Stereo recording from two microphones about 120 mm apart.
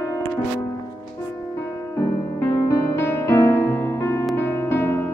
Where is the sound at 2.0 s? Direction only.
30° left (ahead or behind).